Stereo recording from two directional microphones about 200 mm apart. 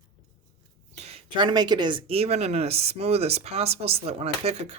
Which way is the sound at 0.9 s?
30° right (ahead or behind).